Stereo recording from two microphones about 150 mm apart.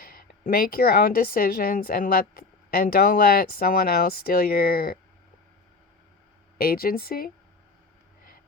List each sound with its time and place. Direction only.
0.0 s speech: 75° left (ahead or behind)
6.6 s speech: 80° left